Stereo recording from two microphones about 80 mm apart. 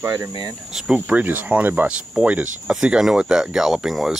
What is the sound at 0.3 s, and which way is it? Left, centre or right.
Speech, right.